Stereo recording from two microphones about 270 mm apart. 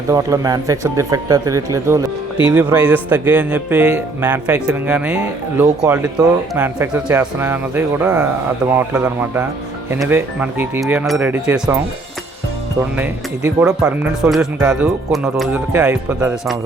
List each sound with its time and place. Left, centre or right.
0.1 s a man's voice: centre
13.0 s speech: centre